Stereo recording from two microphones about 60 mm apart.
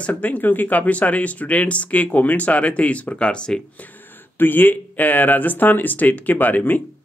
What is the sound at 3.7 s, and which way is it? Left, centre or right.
Speech, left.